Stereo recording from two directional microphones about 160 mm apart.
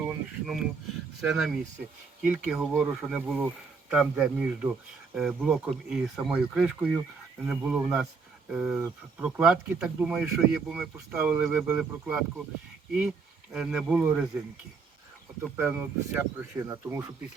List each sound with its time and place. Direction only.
0.0 s a sound: 5° right (ahead or behind)
1.3 s speech: centre (ahead or behind)
15.5 s speech: 10° right (ahead or behind)